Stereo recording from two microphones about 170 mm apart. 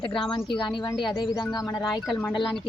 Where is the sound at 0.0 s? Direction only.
30° left (ahead or behind).